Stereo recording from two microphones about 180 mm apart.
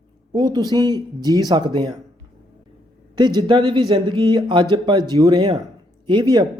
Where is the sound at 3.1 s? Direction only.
25° right (ahead or behind).